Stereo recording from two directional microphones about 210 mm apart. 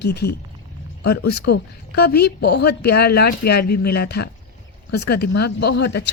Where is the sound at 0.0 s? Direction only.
50° left (ahead or behind).